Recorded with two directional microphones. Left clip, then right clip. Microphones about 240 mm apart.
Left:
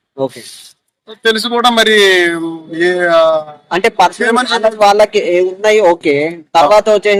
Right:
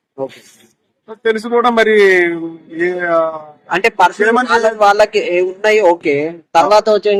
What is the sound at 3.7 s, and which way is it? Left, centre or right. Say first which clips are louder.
Speech: left 1 dB; left.